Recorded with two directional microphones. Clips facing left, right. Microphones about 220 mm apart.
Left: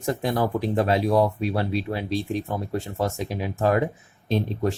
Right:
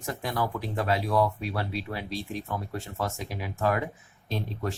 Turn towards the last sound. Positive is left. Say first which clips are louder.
# left 8 dB
turn(degrees=25)  # may be behind; listen again after turning